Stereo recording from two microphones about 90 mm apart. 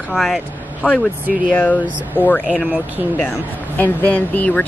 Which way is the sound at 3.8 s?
20° left (ahead or behind).